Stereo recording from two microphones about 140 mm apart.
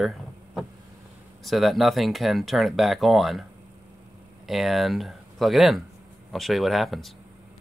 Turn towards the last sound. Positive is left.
turn(degrees=0)  # may be behind; listen again after turning